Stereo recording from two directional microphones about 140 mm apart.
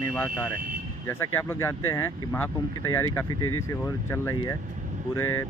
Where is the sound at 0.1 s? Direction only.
15° left (ahead or behind).